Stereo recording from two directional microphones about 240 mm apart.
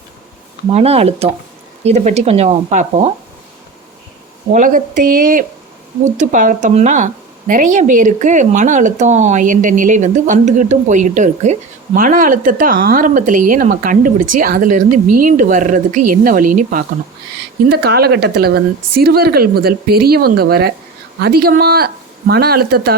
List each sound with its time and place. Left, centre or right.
0.7 s speech: right
4.5 s speech: right
6.1 s speech: right
17.7 s speech: right